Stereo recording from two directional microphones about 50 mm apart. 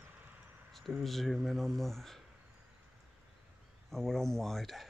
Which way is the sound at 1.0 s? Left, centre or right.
Centre.